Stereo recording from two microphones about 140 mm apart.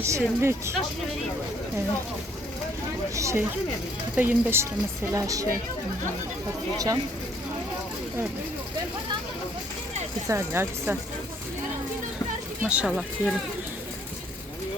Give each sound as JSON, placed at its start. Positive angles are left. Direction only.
{"t": 0.0, "sound": "speech", "side_deg": -20}
{"t": 3.2, "sound": "speech", "side_deg": -20}
{"t": 5.1, "sound": "speech", "side_deg": -25}
{"t": 6.7, "sound": "speech", "side_deg": -25}
{"t": 10.2, "sound": "speech", "side_deg": -20}
{"t": 12.6, "sound": "speech", "side_deg": -5}